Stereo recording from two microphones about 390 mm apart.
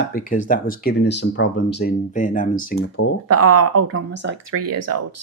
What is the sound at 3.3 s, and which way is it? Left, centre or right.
Speech, right.